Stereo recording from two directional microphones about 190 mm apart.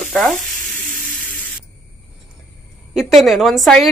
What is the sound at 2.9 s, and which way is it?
Speech, centre (ahead or behind).